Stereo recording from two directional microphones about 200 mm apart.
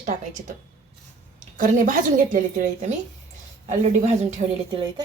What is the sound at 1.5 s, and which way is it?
A woman's voice, 40° right (ahead or behind).